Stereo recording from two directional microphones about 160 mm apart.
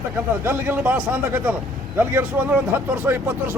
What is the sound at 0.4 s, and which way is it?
A man's voice, 10° right (ahead or behind).